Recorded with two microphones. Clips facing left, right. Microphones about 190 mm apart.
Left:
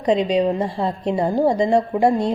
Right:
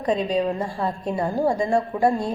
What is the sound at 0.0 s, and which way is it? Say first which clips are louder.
A woman's voice: left 4 dB; 20° left (ahead or behind).